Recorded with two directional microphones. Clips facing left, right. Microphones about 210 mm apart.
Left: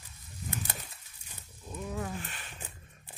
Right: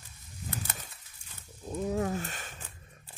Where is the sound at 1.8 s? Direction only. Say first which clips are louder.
Right 7 dB; 40° right (ahead or behind).